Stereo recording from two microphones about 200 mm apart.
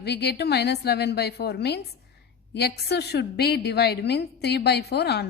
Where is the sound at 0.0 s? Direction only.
55° left (ahead or behind).